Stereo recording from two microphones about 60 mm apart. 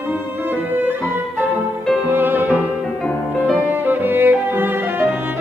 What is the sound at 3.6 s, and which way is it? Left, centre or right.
Music, right.